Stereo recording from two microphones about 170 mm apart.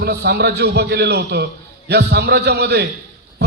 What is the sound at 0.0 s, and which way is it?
A man's voice, 70° right (ahead or behind).